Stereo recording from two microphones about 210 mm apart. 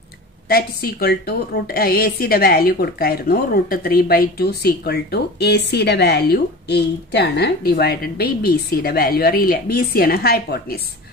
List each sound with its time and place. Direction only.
0.5 s a woman's voice: 45° left (ahead or behind)